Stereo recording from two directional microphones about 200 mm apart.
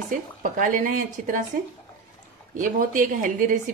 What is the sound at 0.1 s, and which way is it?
A woman's voice, 40° right (ahead or behind).